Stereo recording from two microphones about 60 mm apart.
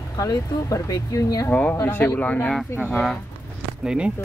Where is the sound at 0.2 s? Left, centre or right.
Left.